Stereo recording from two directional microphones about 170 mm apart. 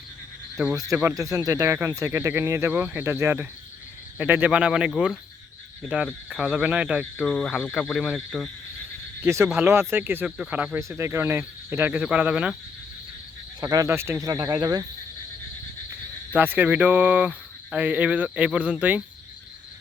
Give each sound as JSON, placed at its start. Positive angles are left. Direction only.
{"t": 0.9, "sound": "speech", "side_deg": -15}
{"t": 9.2, "sound": "speech", "side_deg": -15}
{"t": 13.6, "sound": "speech", "side_deg": -20}
{"t": 16.3, "sound": "speech", "side_deg": -10}